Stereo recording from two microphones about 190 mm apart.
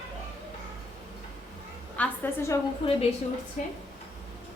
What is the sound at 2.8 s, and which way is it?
Speech, 25° left (ahead or behind).